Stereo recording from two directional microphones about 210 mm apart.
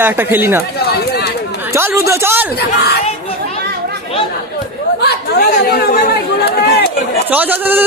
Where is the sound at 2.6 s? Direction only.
50° left (ahead or behind).